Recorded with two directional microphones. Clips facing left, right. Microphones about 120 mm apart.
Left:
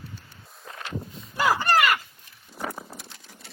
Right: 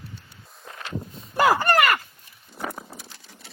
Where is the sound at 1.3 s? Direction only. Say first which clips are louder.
Right 3 dB; 55° right (ahead or behind).